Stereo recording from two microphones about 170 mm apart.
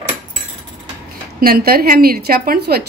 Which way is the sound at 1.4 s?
60° right (ahead or behind).